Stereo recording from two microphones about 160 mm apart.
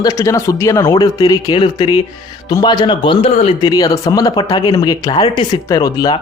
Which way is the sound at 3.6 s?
25° left (ahead or behind).